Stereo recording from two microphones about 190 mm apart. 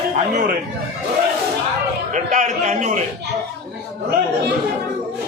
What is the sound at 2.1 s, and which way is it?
Speech, 40° right (ahead or behind).